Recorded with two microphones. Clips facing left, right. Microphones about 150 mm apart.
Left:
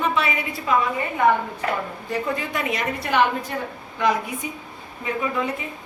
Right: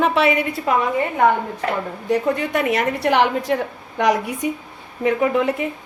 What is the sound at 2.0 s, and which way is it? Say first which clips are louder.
A woman's voice: right 8 dB; 65° right (ahead or behind).